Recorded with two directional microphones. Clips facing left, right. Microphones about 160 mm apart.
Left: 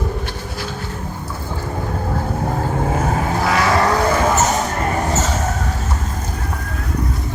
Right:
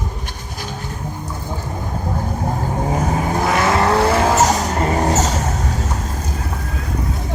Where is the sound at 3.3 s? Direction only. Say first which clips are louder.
Even; 20° right (ahead or behind); by 5.3 s 40° right (ahead or behind).